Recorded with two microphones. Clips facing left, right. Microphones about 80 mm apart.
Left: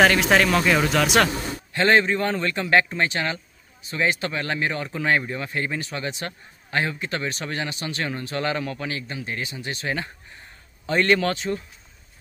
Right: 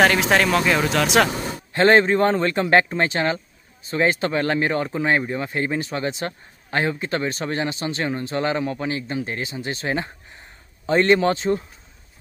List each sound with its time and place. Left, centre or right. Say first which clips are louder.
0.0 s speech: even; centre
1.7 s speech: right 4 dB; right
4.8 s speech: right 2 dB; right